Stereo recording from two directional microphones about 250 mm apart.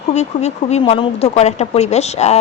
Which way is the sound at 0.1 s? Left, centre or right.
Left.